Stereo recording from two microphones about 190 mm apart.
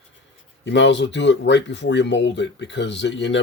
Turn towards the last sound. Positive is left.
turn(degrees=70)  # may be behind; listen again after turning